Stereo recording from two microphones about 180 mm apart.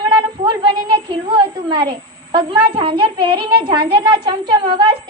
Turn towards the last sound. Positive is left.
turn(degrees=-25)  # may be behind; listen again after turning